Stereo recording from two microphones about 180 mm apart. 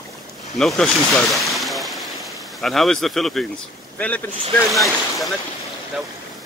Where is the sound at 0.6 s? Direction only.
Centre (ahead or behind).